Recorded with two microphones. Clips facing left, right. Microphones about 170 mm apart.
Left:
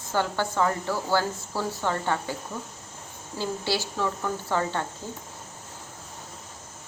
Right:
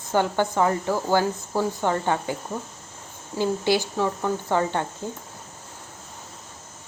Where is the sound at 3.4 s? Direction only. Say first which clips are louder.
Right 6 dB; 15° right (ahead or behind).